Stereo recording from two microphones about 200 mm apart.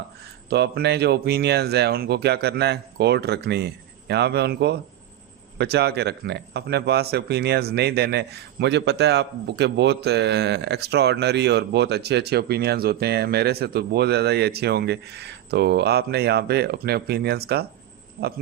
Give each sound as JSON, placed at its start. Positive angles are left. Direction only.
{"t": 0.5, "sound": "a man's voice", "side_deg": -55}
{"t": 18.2, "sound": "speech", "side_deg": -40}